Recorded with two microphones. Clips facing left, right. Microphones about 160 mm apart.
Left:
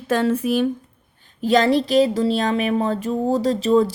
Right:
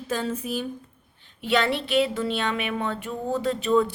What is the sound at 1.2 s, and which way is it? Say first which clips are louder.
A woman's voice: left 7 dB; 40° left (ahead or behind).